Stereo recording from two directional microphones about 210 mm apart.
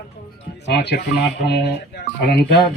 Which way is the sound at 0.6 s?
55° left (ahead or behind).